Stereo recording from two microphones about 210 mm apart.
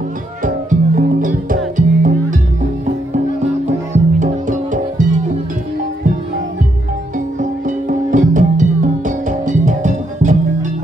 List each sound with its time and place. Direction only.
0.4 s music: 40° right (ahead or behind)
3.9 s music: 35° right (ahead or behind)
7.2 s music: 35° right (ahead or behind)